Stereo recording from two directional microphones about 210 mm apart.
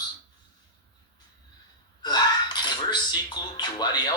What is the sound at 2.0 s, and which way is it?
Speech, 20° left (ahead or behind).